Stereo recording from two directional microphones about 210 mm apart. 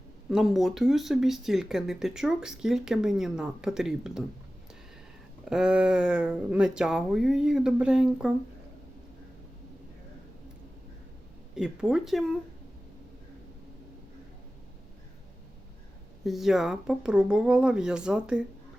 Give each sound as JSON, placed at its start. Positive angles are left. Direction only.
{"t": 0.3, "sound": "speech", "side_deg": 0}
{"t": 5.5, "sound": "speech", "side_deg": -5}
{"t": 11.5, "sound": "speech", "side_deg": -5}
{"t": 16.2, "sound": "speech", "side_deg": 0}